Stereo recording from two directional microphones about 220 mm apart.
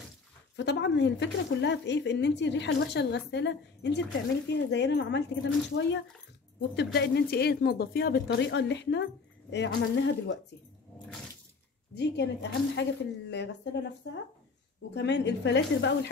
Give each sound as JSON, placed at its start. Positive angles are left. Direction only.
{"t": 0.6, "sound": "speech", "side_deg": 50}
{"t": 11.9, "sound": "speech", "side_deg": 50}
{"t": 15.0, "sound": "speech", "side_deg": 50}